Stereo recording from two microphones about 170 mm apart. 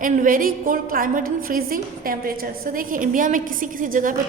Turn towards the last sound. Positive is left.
turn(degrees=-50)  # may be behind; listen again after turning